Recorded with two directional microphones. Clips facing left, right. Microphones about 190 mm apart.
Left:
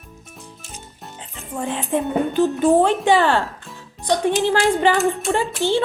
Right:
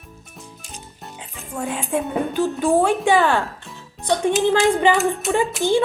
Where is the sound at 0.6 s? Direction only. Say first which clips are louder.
Even; centre (ahead or behind).